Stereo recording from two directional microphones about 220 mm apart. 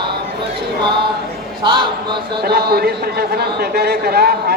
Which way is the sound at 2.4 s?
45° right (ahead or behind).